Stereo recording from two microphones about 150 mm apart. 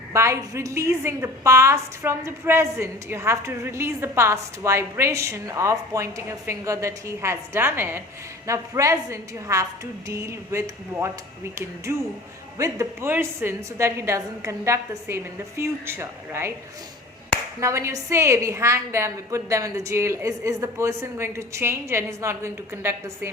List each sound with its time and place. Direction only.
0.1 s a woman's voice: 20° right (ahead or behind)
17.6 s a woman's voice: 20° right (ahead or behind)